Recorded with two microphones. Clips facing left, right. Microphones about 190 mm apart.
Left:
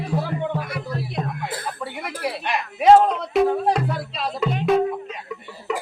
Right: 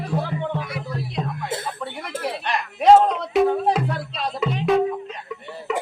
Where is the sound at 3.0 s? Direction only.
Centre (ahead or behind).